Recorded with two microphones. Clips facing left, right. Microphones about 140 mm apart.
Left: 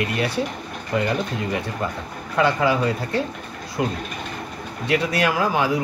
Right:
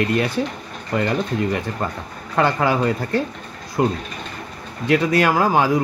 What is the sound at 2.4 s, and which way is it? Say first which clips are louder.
Speech: right 1 dB; 50° right (ahead or behind).